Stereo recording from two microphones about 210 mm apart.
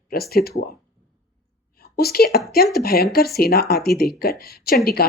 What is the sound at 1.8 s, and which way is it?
A woman's voice, 45° left (ahead or behind).